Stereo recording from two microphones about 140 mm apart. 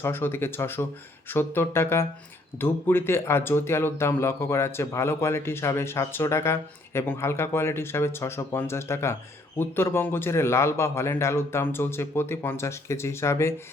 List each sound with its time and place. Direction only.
0.0 s speech: 15° left (ahead or behind)